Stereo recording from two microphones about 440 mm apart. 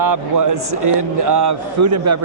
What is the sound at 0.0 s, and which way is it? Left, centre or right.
A man's voice, right.